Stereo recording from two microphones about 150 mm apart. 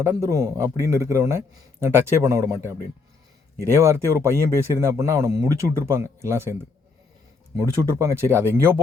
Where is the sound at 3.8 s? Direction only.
20° right (ahead or behind).